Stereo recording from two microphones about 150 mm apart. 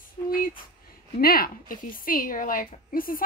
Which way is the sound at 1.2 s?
85° left.